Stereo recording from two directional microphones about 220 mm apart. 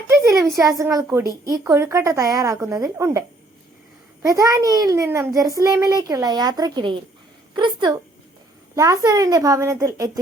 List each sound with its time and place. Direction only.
0.1 s a child's voice: 15° right (ahead or behind)